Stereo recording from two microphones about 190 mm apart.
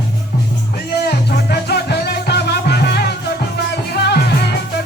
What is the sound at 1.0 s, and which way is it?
Music, 60° left (ahead or behind).